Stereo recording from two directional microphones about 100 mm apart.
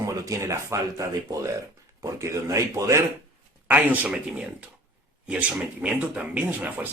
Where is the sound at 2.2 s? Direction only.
30° right (ahead or behind).